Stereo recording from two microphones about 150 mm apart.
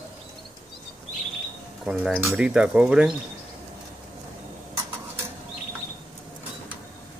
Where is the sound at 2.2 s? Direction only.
15° right (ahead or behind).